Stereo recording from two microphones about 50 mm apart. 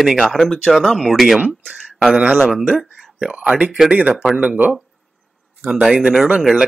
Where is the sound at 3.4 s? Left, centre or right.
Right.